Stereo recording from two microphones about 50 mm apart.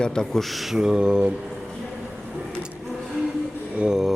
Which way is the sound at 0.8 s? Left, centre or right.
Centre.